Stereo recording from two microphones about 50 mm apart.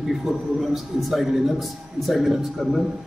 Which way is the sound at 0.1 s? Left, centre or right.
Centre.